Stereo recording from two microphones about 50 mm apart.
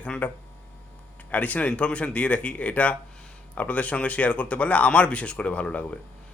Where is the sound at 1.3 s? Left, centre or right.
Left.